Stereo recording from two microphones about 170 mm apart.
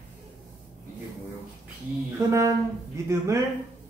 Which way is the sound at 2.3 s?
20° right (ahead or behind).